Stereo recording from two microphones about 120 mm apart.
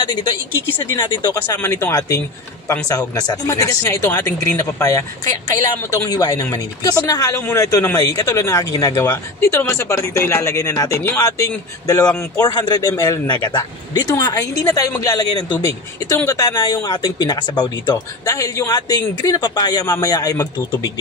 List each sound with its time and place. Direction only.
0.9 s speech: 40° left (ahead or behind)
1.6 s speech: 20° left (ahead or behind)